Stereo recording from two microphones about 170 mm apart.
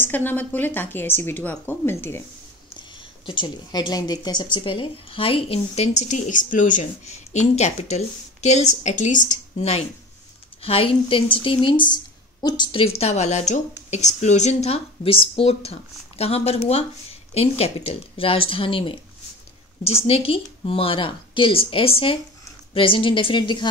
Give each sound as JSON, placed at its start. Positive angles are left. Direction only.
{"t": 0.0, "sound": "a woman's voice", "side_deg": 10}
{"t": 3.3, "sound": "speech", "side_deg": 25}
{"t": 20.1, "sound": "a woman's voice", "side_deg": 35}